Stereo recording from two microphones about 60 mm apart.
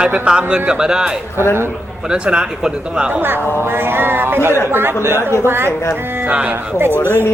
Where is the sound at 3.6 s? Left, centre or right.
Right.